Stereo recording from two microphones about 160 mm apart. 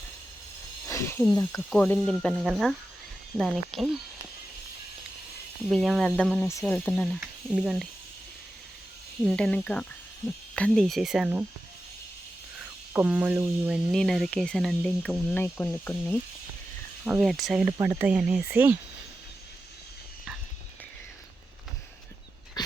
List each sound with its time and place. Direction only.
0.9 s a sound: 15° left (ahead or behind)
1.3 s speech: 25° left (ahead or behind)
1.7 s speech: 5° left (ahead or behind)
5.6 s speech: centre (ahead or behind)
9.2 s speech: 5° left (ahead or behind)
12.5 s speech: 10° right (ahead or behind); by 16.1 s 10° left (ahead or behind)
17.1 s speech: centre (ahead or behind)
22.6 s dog: 25° left (ahead or behind)